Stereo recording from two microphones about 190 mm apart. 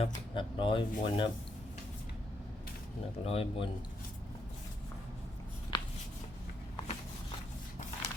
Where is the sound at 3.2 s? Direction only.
30° left (ahead or behind).